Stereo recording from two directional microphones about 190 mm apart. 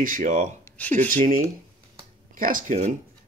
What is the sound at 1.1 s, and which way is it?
Speech, 50° right (ahead or behind).